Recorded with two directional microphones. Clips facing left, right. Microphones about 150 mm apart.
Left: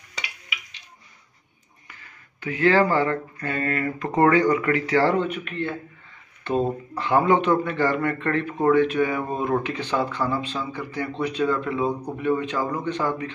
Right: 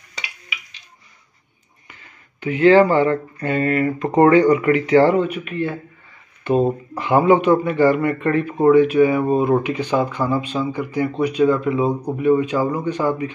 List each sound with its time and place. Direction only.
1.9 s speech: 20° right (ahead or behind)
5.1 s speech: 5° right (ahead or behind)